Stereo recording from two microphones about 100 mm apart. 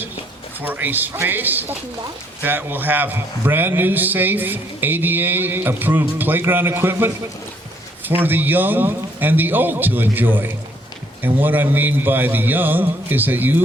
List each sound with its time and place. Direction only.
0.6 s a man's voice: 20° right (ahead or behind)